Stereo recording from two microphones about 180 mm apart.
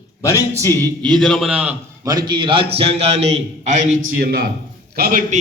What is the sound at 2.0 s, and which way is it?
A man's voice, 20° right (ahead or behind).